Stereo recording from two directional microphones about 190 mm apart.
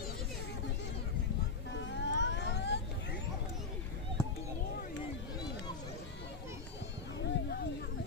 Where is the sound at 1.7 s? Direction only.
70° left (ahead or behind).